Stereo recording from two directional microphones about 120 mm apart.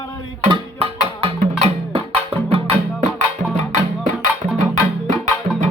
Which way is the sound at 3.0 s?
80° right.